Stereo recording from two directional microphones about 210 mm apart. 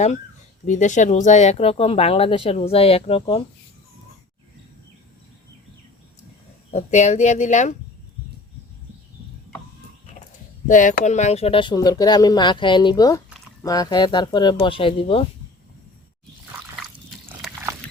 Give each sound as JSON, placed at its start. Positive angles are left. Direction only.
{"t": 0.6, "sound": "speech", "side_deg": 35}
{"t": 6.7, "sound": "speech", "side_deg": 35}
{"t": 10.7, "sound": "speech", "side_deg": 40}
{"t": 17.2, "sound": "dog", "side_deg": -10}